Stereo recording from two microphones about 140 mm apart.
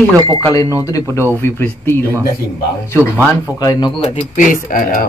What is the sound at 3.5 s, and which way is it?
Speech, 30° left (ahead or behind).